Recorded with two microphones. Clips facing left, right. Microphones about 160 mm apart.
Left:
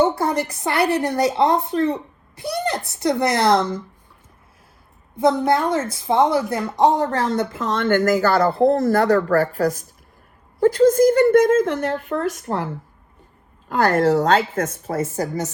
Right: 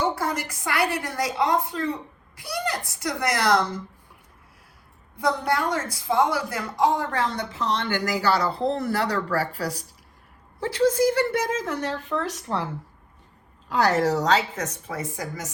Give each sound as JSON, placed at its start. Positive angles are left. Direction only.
{"t": 0.0, "sound": "a sound", "side_deg": 30}
{"t": 0.6, "sound": "speech", "side_deg": 30}
{"t": 5.1, "sound": "speech", "side_deg": 20}
{"t": 6.7, "sound": "speech", "side_deg": 40}
{"t": 13.7, "sound": "speech", "side_deg": 55}